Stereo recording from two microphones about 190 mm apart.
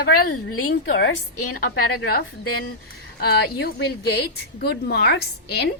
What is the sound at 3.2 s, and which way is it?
A woman's voice, 55° left (ahead or behind).